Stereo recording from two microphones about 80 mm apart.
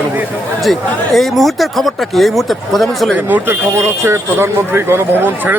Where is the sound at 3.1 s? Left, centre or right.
Right.